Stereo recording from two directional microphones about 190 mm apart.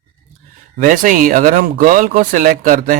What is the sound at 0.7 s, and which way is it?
Speech, 45° right (ahead or behind).